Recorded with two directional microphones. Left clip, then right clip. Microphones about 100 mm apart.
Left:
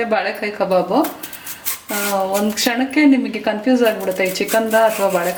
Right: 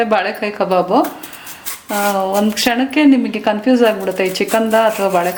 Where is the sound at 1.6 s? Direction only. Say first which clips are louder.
Right 4 dB; centre (ahead or behind).